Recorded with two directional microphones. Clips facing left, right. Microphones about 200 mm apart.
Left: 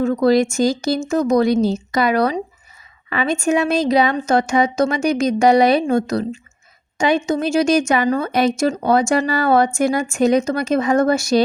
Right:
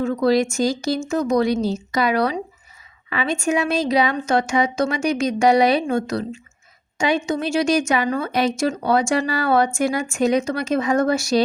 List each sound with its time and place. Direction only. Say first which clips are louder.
0.0 s a woman's voice: left 3 dB; 45° left (ahead or behind)